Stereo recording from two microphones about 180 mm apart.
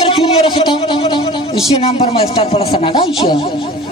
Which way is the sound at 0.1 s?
30° left (ahead or behind).